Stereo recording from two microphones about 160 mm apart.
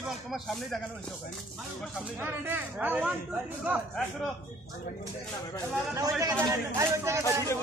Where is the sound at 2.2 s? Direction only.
15° right (ahead or behind).